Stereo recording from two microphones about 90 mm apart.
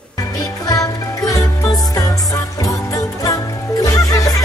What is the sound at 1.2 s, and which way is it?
Music, 40° left (ahead or behind).